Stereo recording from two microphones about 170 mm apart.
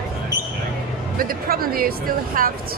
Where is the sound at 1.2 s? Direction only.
60° right (ahead or behind).